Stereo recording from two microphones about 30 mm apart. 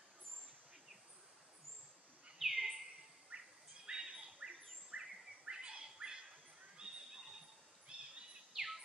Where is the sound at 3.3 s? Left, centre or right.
Right.